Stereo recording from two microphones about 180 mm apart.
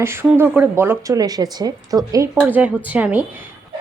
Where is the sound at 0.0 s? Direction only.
15° right (ahead or behind).